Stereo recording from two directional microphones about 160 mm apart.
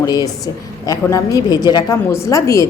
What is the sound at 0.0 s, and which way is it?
A woman's voice, 25° left (ahead or behind).